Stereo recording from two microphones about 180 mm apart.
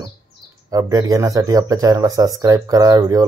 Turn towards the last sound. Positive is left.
turn(degrees=-20)  # may be behind; listen again after turning